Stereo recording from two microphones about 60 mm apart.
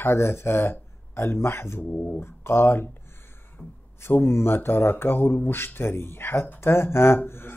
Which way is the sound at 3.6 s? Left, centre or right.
Centre.